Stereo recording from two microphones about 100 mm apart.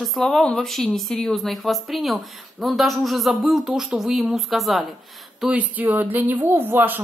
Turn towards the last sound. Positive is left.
turn(degrees=-20)  # may be behind; listen again after turning